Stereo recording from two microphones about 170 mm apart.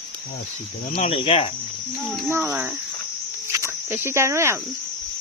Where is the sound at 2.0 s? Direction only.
Centre (ahead or behind); by 4.6 s 15° right (ahead or behind).